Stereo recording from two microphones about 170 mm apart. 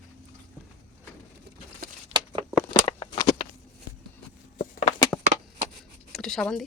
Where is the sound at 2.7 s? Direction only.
25° left (ahead or behind).